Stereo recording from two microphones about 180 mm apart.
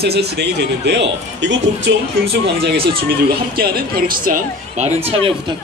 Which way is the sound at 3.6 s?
55° right (ahead or behind).